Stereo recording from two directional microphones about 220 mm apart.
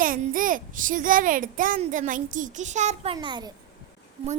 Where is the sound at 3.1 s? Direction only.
20° right (ahead or behind).